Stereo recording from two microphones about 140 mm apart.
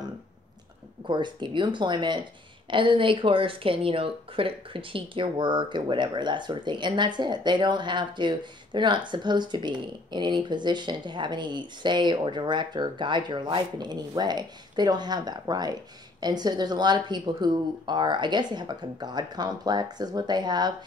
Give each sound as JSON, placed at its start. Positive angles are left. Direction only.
{"t": 1.0, "sound": "speech", "side_deg": -35}